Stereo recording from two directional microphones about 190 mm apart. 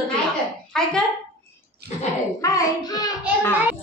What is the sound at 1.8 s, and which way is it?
Speech, 60° right (ahead or behind).